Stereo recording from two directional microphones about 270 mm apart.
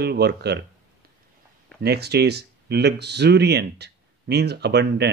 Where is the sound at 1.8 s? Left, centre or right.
Right.